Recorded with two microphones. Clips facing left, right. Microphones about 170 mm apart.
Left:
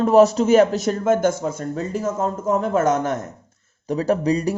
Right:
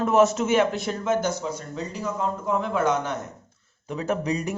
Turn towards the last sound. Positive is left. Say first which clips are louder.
# left 6 dB
turn(degrees=35)  # may be behind; listen again after turning